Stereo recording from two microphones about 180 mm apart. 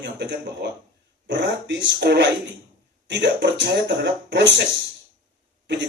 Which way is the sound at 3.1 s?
75° right (ahead or behind).